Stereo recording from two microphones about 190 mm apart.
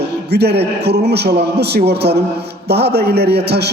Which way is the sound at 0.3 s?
60° right (ahead or behind).